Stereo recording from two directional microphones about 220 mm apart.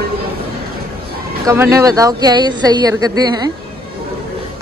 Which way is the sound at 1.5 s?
15° right (ahead or behind).